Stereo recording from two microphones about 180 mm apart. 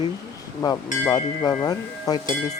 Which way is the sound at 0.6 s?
20° left (ahead or behind).